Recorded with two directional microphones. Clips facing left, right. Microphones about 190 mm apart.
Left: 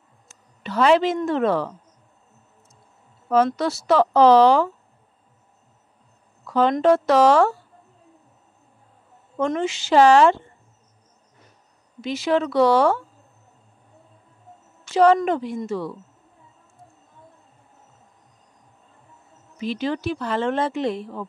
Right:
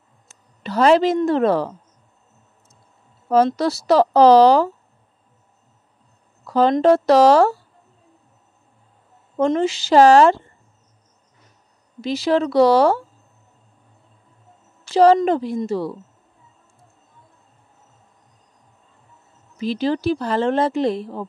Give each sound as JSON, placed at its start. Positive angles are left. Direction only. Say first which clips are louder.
{"t": 0.3, "sound": "speech", "louder": "right 3 dB", "side_deg": -40}
{"t": 3.5, "sound": "speech", "louder": "right 3 dB", "side_deg": -35}
{"t": 6.4, "sound": "speech", "louder": "right 3 dB", "side_deg": -35}
{"t": 9.4, "sound": "speech", "louder": "right 5 dB", "side_deg": -35}
{"t": 12.0, "sound": "speech", "louder": "right 3 dB", "side_deg": -35}
{"t": 14.9, "sound": "a woman's voice", "louder": "right 3 dB", "side_deg": -35}
{"t": 19.6, "sound": "speech", "louder": "right 4 dB", "side_deg": -35}